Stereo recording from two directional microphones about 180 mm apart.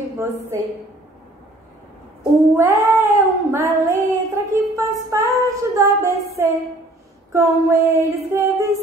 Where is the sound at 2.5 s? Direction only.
15° right (ahead or behind).